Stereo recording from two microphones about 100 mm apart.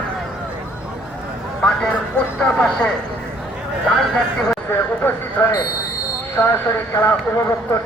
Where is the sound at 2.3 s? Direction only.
10° left (ahead or behind).